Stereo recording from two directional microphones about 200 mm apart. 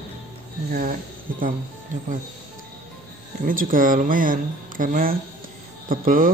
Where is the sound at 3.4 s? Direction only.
45° right (ahead or behind).